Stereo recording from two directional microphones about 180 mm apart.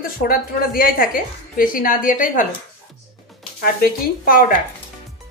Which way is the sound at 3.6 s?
55° left (ahead or behind).